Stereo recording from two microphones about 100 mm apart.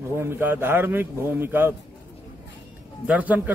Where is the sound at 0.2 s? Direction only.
25° right (ahead or behind).